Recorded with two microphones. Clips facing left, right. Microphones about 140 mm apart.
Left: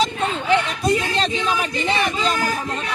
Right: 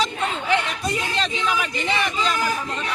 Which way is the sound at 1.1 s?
35° left (ahead or behind).